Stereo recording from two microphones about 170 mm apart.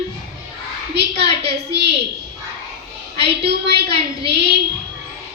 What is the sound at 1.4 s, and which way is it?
Speech, 80° right.